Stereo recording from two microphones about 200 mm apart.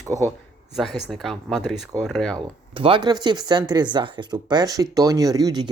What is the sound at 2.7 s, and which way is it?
Speech, 25° right (ahead or behind).